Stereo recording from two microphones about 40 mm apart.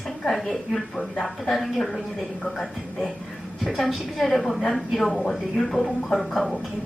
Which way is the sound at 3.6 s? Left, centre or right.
Centre.